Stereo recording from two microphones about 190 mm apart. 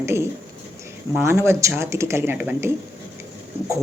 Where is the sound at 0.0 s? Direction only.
15° right (ahead or behind).